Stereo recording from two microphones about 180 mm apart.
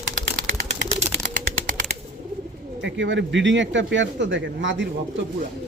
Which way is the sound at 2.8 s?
80° right.